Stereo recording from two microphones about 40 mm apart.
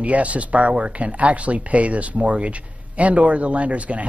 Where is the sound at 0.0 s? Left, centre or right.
Right.